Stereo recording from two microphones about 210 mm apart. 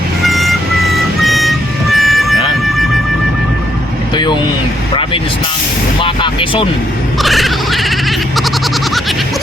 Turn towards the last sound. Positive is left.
turn(degrees=0)  # may be behind; listen again after turning